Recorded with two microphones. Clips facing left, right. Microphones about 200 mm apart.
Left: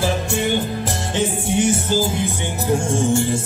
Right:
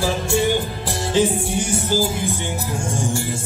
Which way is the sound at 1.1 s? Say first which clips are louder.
Right 1 dB; 20° left (ahead or behind).